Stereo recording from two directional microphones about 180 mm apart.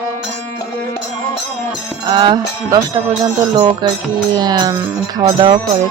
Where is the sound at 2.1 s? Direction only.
25° right (ahead or behind).